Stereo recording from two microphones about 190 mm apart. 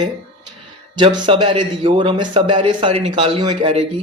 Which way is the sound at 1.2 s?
25° right (ahead or behind).